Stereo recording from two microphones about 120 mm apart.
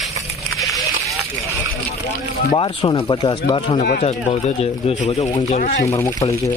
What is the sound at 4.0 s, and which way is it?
Speech, 65° left (ahead or behind).